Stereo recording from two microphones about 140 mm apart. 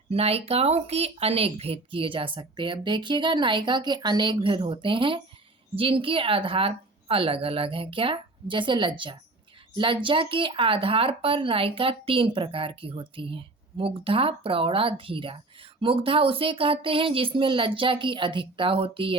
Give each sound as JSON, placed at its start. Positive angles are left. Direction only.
{"t": 0.1, "sound": "speech", "side_deg": -45}